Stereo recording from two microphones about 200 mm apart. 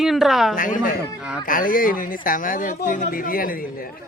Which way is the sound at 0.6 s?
40° left (ahead or behind).